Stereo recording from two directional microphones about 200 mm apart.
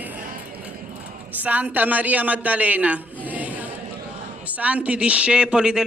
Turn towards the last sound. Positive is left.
turn(degrees=-5)  # may be behind; listen again after turning